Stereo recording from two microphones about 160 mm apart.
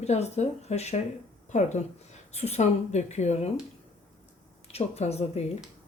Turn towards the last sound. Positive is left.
turn(degrees=40)  # may be behind; listen again after turning